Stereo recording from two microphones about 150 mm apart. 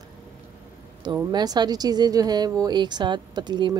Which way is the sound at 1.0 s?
25° right (ahead or behind).